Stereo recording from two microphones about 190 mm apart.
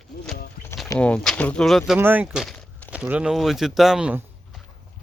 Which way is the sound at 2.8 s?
5° right (ahead or behind).